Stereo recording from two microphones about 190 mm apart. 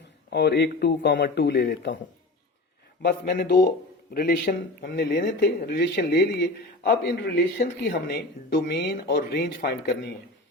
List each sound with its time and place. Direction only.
0.3 s speech: 60° left (ahead or behind)
3.0 s speech: 50° left (ahead or behind)